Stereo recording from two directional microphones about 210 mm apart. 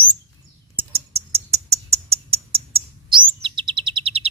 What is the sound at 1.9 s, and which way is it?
Bird, 30° right (ahead or behind).